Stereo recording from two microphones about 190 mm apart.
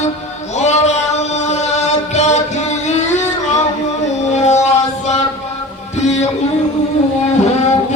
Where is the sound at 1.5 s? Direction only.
35° left (ahead or behind).